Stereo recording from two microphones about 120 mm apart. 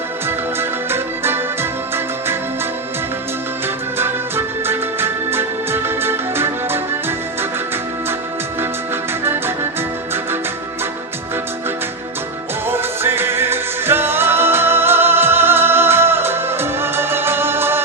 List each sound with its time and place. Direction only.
0.9 s music: 20° right (ahead or behind)
3.9 s music: 20° right (ahead or behind)
12.6 s music: 20° right (ahead or behind)